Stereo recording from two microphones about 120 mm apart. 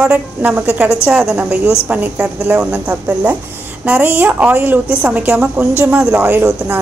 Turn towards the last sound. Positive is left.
turn(degrees=-20)  # may be behind; listen again after turning